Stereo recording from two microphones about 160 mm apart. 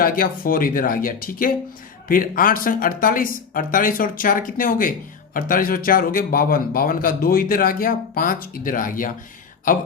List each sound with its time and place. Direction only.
0.0 s speech: 65° left (ahead or behind)